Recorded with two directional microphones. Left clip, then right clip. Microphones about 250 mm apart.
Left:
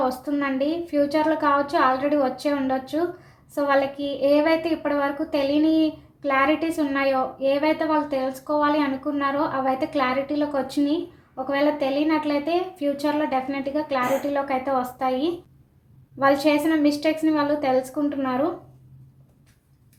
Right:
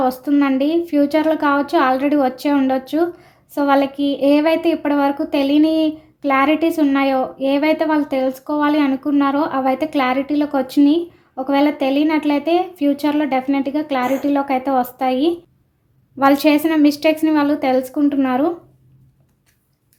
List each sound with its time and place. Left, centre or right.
0.0 s a woman's voice: right